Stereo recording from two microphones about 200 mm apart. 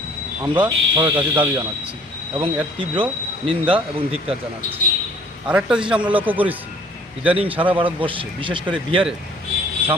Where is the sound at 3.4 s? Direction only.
25° right (ahead or behind).